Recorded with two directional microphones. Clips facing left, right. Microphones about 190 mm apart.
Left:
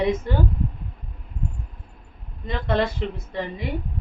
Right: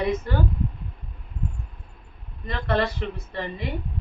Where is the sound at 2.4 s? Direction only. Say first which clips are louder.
Left 1 dB; 20° left (ahead or behind).